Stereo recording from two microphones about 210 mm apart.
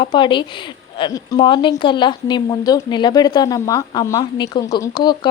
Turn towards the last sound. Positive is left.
turn(degrees=20)  # may be behind; listen again after turning